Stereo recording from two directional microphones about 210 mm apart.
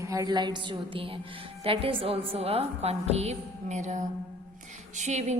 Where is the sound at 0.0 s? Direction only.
15° right (ahead or behind).